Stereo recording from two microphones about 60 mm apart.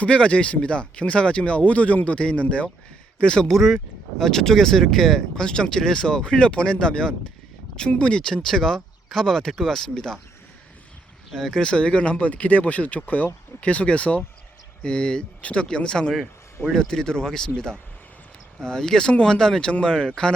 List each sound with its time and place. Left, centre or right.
0.0 s speech: left
3.5 s speech: centre
11.3 s speech: centre